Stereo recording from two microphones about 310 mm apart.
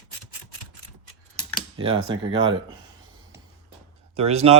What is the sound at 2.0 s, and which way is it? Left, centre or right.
Speech, centre.